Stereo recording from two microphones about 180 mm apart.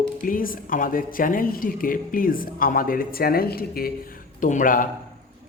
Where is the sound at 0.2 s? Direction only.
50° left (ahead or behind).